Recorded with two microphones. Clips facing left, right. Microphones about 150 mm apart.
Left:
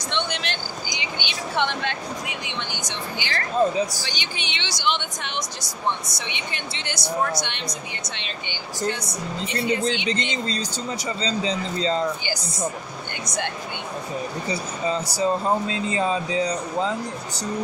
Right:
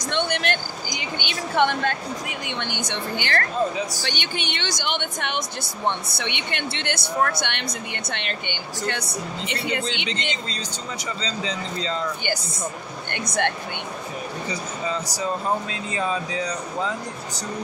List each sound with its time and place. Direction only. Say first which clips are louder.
0.1 s speech: right 4 dB; 50° right (ahead or behind)
10.0 s speech: left 4 dB; 40° left (ahead or behind)
13.1 s speech: right 5 dB; 60° right (ahead or behind)
14.5 s speech: left 3 dB; 30° left (ahead or behind)